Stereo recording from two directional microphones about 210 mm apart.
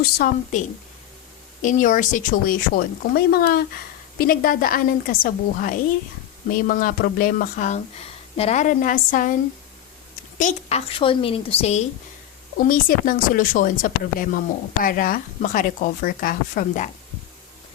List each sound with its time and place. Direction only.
0.0 s speech: 45° left (ahead or behind)
1.6 s speech: 40° left (ahead or behind)
12.5 s speech: 45° left (ahead or behind)